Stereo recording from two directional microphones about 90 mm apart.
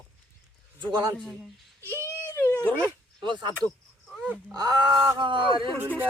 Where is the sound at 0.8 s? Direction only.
55° right (ahead or behind).